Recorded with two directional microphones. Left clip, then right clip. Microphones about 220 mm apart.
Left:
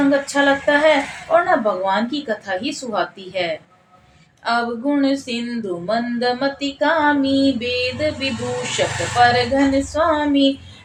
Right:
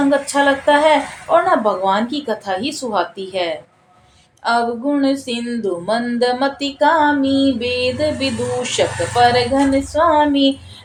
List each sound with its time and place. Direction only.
0.1 s speech: 25° right (ahead or behind)